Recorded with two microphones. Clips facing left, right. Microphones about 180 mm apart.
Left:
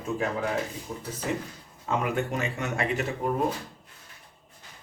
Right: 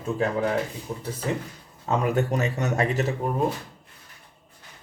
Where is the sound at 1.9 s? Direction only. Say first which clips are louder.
Right 4 dB; 40° right (ahead or behind).